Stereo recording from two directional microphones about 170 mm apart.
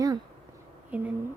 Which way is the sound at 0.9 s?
10° right (ahead or behind).